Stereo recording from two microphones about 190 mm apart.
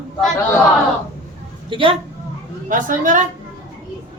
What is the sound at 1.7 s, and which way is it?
Speech, 25° right (ahead or behind).